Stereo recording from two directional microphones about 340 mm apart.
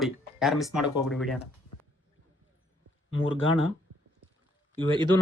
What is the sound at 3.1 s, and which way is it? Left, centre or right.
Speech, left.